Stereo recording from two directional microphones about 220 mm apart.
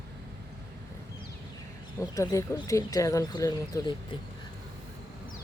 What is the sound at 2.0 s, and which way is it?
Speech, 15° left (ahead or behind).